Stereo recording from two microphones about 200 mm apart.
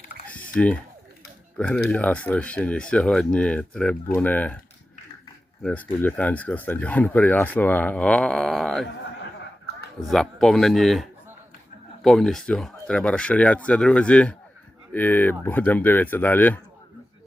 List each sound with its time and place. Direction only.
0.3 s typing: 5° left (ahead or behind)
1.5 s speech: 5° left (ahead or behind)
5.6 s speech: 10° left (ahead or behind)
10.0 s speech: centre (ahead or behind)
12.0 s speech: centre (ahead or behind)